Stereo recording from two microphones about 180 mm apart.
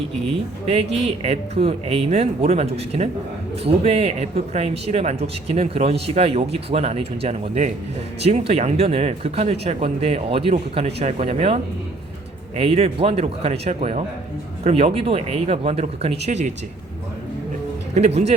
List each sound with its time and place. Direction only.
0.7 s speech: 35° right (ahead or behind)
17.9 s speech: 35° right (ahead or behind)